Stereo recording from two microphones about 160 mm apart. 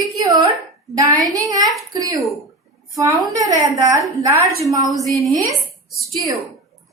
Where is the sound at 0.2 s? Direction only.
25° right (ahead or behind).